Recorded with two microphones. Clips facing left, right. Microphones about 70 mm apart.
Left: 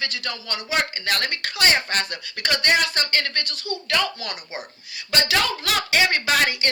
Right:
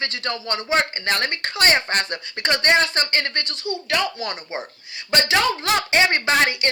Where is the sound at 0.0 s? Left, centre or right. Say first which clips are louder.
Right 3 dB; right.